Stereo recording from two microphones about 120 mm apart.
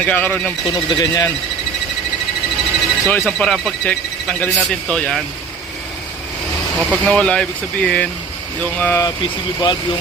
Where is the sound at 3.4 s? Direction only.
5° left (ahead or behind).